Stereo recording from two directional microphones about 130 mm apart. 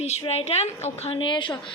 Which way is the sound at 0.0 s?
55° left (ahead or behind).